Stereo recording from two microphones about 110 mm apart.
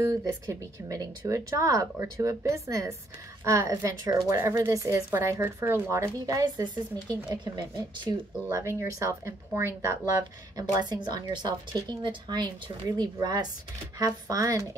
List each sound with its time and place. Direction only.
0.0 s speech: 30° right (ahead or behind)
8.5 s speech: 25° right (ahead or behind)
10.7 s a woman's voice: 40° right (ahead or behind)